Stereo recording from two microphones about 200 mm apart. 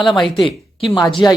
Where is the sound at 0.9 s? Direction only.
20° left (ahead or behind).